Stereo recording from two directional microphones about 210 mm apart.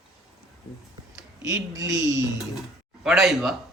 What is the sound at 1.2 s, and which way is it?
Speech, 15° right (ahead or behind).